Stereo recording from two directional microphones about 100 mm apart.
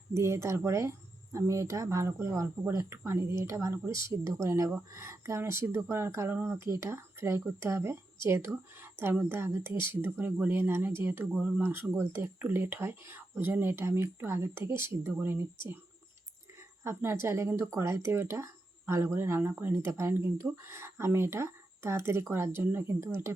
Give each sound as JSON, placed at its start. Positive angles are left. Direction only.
{"t": 0.1, "sound": "speech", "side_deg": -30}
{"t": 16.8, "sound": "speech", "side_deg": -25}